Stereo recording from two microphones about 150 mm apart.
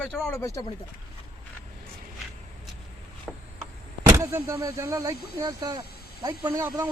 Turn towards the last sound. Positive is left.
turn(degrees=-20)  # may be behind; listen again after turning